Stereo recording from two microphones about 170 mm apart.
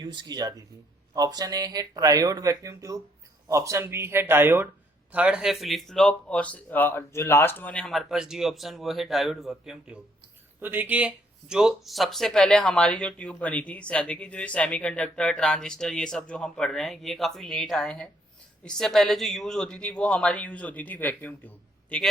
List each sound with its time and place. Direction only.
0.0 s speech: 25° right (ahead or behind); by 22.0 s 10° left (ahead or behind)